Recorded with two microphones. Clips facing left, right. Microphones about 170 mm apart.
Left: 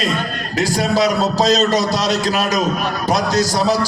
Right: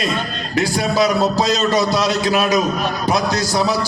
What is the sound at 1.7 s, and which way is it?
A man's voice, 40° left (ahead or behind).